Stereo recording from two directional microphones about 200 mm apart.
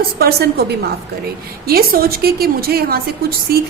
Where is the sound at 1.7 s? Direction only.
50° right (ahead or behind).